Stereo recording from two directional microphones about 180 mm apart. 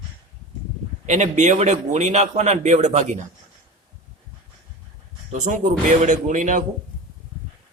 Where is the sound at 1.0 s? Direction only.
40° right (ahead or behind).